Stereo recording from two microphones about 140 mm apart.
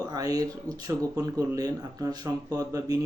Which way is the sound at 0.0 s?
25° right (ahead or behind).